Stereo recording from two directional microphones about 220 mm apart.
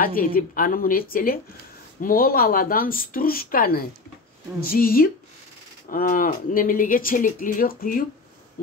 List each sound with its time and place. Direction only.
0.0 s speech: 40° left (ahead or behind)